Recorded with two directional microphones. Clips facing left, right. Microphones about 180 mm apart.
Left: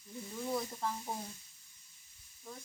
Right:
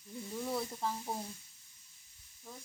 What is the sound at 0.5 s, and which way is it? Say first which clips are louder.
Speech: left 1 dB; 5° right (ahead or behind).